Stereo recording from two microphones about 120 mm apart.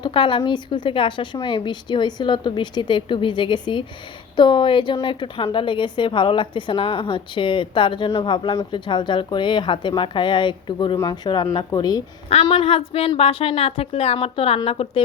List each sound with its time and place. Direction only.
0.0 s a woman's voice: 45° left (ahead or behind)
12.3 s a woman's voice: 55° left (ahead or behind)